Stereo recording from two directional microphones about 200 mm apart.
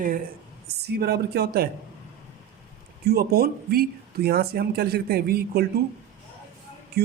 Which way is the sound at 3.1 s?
50° right (ahead or behind).